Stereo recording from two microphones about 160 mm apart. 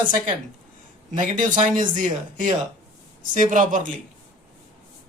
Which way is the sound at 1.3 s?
55° right (ahead or behind).